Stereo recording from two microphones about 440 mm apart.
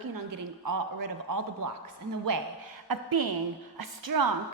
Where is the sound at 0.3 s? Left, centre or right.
Right.